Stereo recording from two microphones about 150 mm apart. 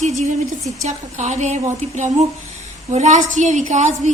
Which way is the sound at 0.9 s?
50° right (ahead or behind).